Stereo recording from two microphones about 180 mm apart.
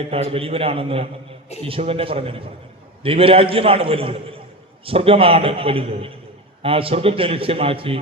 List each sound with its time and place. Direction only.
0.1 s a man's voice: 30° right (ahead or behind)